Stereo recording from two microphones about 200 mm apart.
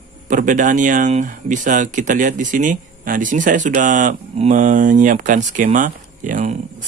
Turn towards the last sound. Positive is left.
turn(degrees=-40)  # may be behind; listen again after turning